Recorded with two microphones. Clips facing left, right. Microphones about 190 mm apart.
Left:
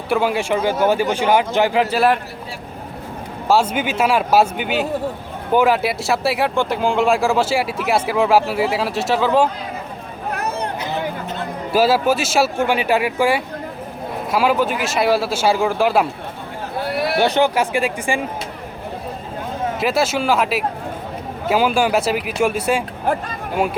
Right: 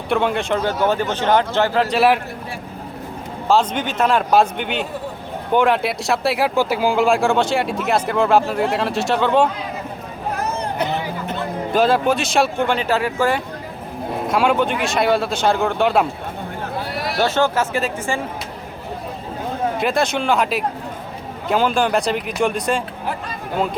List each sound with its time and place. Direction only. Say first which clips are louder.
0.1 s a man's voice: left 1 dB; 5° left (ahead or behind)
3.5 s a man's voice: left 1 dB; 10° left (ahead or behind)
11.7 s a man's voice: left 1 dB; 5° left (ahead or behind)
17.0 s a sound: left 3 dB; 60° left (ahead or behind)
17.2 s a man's voice: even; 15° left (ahead or behind)
19.8 s a man's voice: left 2 dB; 5° left (ahead or behind)
23.1 s speech: left 8 dB; 50° left (ahead or behind)